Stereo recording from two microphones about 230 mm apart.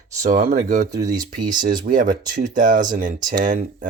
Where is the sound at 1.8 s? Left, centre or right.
Right.